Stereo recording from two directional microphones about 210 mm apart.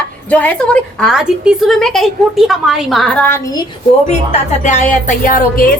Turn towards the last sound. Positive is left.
turn(degrees=40)  # may be behind; listen again after turning